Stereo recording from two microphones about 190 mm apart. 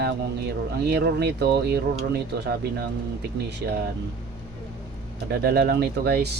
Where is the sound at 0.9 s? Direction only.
60° right (ahead or behind).